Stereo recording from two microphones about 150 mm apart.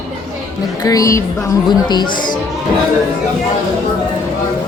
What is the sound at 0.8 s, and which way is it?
A woman's voice, 25° left (ahead or behind).